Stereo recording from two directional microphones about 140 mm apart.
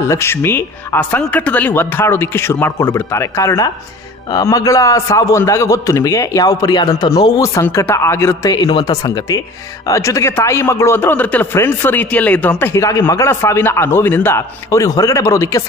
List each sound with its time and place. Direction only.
0.0 s a man's voice: 20° left (ahead or behind)
8.5 s a man's voice: 30° left (ahead or behind)